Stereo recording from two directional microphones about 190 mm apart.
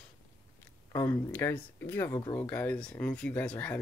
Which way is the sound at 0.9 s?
10° left (ahead or behind).